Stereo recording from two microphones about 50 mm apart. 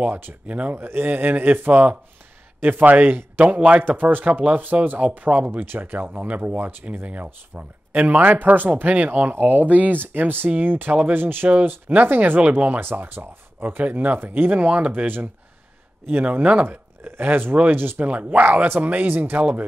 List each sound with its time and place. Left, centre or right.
0.0 s speech: right
0.5 s speech: right
0.7 s speech: right
3.4 s speech: right
3.8 s speech: right
14.6 s speech: right
14.9 s speech: right
18.0 s speech: right
19.3 s speech: right